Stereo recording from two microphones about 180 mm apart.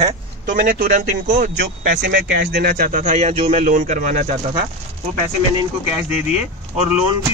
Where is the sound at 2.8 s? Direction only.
40° right (ahead or behind).